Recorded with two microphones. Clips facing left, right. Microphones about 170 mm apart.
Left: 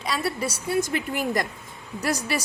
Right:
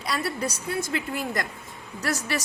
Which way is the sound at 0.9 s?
15° left (ahead or behind).